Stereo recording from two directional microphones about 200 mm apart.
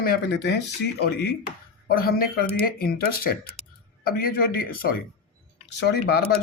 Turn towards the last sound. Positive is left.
turn(degrees=55)  # may be behind; listen again after turning